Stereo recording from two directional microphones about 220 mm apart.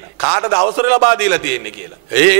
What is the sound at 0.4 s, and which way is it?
A man's voice, 20° right (ahead or behind).